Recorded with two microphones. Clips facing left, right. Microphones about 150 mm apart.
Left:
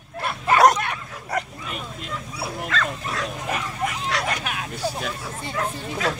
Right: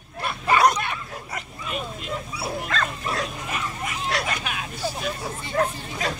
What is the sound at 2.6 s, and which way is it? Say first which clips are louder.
Bow-wow: even; 40° right (ahead or behind).